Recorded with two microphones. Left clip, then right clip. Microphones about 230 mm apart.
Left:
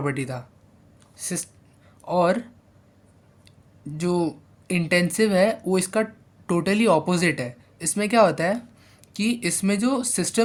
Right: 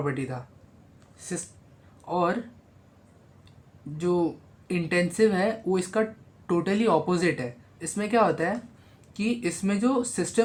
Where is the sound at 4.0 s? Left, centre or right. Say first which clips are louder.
Left 1 dB; left.